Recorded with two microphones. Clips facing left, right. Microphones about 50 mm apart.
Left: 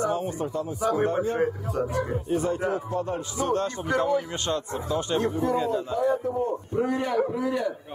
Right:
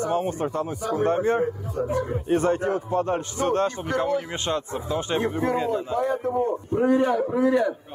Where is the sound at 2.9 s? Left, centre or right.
Right.